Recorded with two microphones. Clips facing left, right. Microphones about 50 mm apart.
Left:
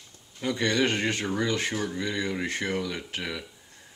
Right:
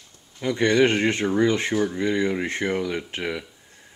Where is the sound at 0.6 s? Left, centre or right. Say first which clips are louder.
Right 7 dB; right.